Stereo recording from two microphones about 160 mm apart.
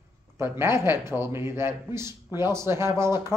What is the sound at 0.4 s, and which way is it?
A man's voice, 15° right (ahead or behind).